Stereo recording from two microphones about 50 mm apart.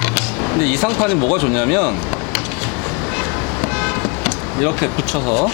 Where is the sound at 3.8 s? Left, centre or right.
Centre.